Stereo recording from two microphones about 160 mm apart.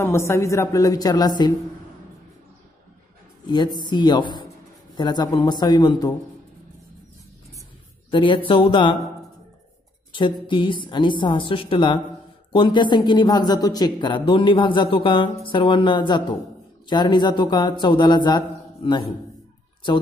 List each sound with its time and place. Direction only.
0.0 s speech: 15° left (ahead or behind)
3.4 s speech: 25° left (ahead or behind)
8.1 s a woman's voice: 30° left (ahead or behind)
10.4 s a woman's voice: 30° left (ahead or behind)